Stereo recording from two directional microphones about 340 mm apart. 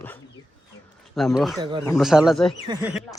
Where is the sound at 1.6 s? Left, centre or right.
Centre.